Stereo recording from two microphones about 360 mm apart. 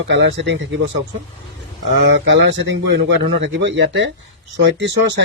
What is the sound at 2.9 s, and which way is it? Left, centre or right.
Speech, right.